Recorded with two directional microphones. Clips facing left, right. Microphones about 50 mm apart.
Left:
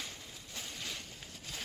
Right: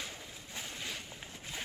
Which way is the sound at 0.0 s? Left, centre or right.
Centre.